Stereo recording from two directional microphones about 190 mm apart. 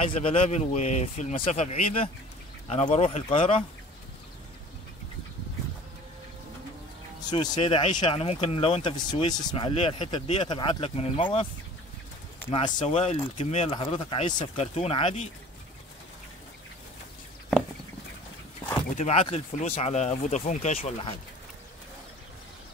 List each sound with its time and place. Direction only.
0.2 s speech: 30° left (ahead or behind)
7.2 s speech: 20° left (ahead or behind)
7.5 s speech: 30° left (ahead or behind)
12.4 s speech: 25° left (ahead or behind)
18.9 s speech: 30° left (ahead or behind)